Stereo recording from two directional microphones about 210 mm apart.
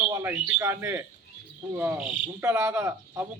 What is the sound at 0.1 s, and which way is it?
Speech, 15° right (ahead or behind).